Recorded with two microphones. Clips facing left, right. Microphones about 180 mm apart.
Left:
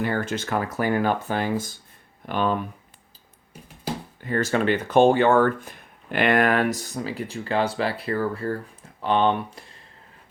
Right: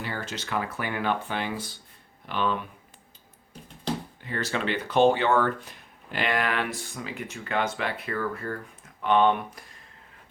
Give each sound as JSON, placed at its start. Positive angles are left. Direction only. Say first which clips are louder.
{"t": 0.0, "sound": "speech", "louder": "left 9 dB", "side_deg": 50}
{"t": 3.9, "sound": "a sound", "louder": "even", "side_deg": 10}
{"t": 4.2, "sound": "speech", "louder": "left 7 dB", "side_deg": 45}